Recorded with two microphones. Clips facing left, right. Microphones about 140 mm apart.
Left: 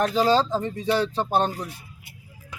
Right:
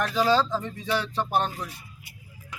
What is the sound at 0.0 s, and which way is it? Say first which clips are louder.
A man's voice: left 3 dB; 30° left (ahead or behind).